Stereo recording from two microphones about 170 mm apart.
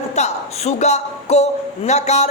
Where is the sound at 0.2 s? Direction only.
40° left (ahead or behind).